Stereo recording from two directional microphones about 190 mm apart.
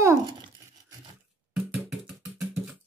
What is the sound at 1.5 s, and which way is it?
Music, 5° right (ahead or behind).